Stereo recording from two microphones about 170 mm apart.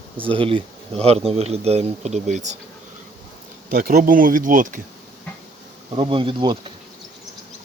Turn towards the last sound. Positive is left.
turn(degrees=-30)  # may be behind; listen again after turning